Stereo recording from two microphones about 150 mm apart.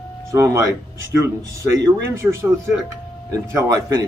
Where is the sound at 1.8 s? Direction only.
20° right (ahead or behind).